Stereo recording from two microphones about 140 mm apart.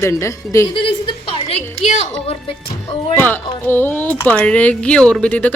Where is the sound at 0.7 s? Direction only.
35° left (ahead or behind).